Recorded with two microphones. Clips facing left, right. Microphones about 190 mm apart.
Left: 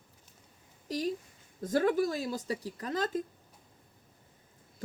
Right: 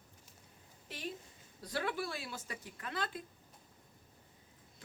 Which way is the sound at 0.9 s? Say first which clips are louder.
Left 11 dB; 40° left (ahead or behind).